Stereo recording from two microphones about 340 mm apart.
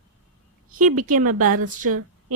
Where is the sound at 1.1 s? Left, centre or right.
Right.